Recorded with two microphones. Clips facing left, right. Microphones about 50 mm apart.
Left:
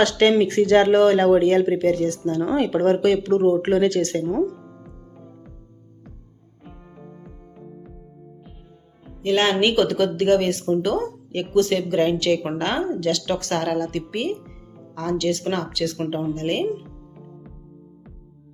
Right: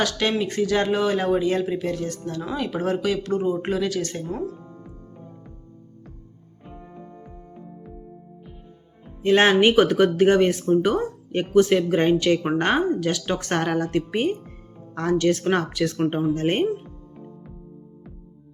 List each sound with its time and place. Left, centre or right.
0.0 s speech: left
4.4 s music: centre
6.7 s music: centre
9.2 s speech: right
16.0 s speech: centre
16.3 s speech: right
16.7 s music: centre